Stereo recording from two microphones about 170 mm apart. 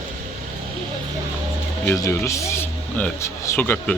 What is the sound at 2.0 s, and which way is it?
Speech, 20° left (ahead or behind).